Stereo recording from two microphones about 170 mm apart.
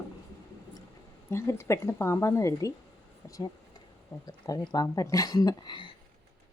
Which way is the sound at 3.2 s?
15° left (ahead or behind).